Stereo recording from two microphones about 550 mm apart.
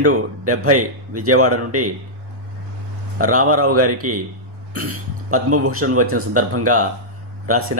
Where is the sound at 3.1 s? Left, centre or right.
Right.